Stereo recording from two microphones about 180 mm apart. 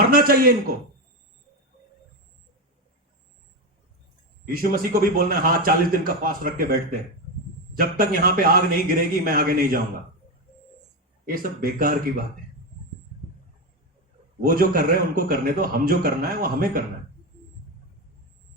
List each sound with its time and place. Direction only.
0.1 s a sound: 55° right (ahead or behind)
4.5 s a man's voice: 55° right (ahead or behind)
7.8 s a man's voice: 55° right (ahead or behind)
11.3 s a man's voice: 55° right (ahead or behind)
14.4 s a man's voice: 55° right (ahead or behind)